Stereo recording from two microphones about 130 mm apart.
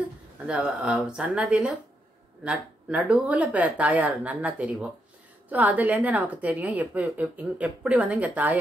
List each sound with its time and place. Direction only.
0.5 s a woman's voice: 10° right (ahead or behind)